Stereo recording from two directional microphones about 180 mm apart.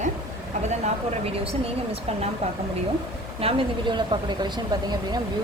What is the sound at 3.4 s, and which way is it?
Speech, 30° right (ahead or behind).